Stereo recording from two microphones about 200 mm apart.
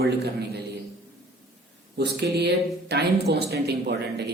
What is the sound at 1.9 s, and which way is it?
A man's voice, 60° right (ahead or behind).